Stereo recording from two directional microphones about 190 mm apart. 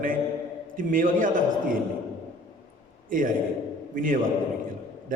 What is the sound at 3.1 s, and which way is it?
A man's voice, 45° right (ahead or behind).